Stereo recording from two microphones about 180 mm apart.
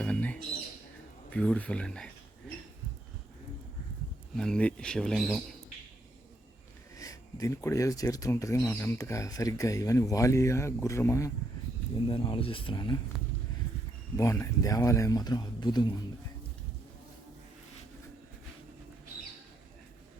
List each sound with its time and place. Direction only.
0.0 s bird: 5° left (ahead or behind)
1.3 s speech: 5° left (ahead or behind)
4.4 s speech: 5° left (ahead or behind)
6.9 s speech: 20° left (ahead or behind)
11.9 s speech: 25° left (ahead or behind)
14.2 s speech: 15° left (ahead or behind)